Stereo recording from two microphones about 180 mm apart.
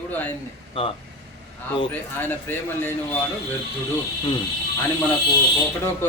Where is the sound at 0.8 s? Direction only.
30° left (ahead or behind).